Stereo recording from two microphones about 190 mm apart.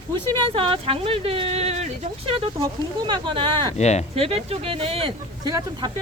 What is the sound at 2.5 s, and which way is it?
Speech, 20° right (ahead or behind).